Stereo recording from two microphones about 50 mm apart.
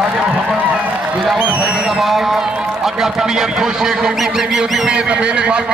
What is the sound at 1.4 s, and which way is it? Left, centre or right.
Speech, right.